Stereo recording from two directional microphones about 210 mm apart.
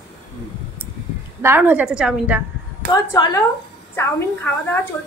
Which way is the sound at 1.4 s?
10° right (ahead or behind).